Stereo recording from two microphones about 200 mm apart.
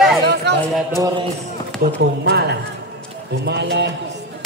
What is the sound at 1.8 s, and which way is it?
Speech, 55° right (ahead or behind).